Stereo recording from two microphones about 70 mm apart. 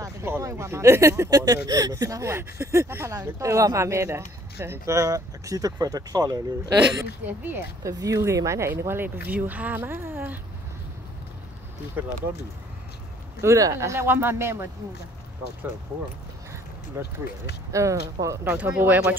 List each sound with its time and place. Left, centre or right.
0.2 s speech: right
1.3 s speech: right
2.2 s speech: right
7.2 s speech: right
7.8 s speech: right
13.4 s speech: right
14.0 s speech: right
17.0 s speech: right
18.4 s speech: centre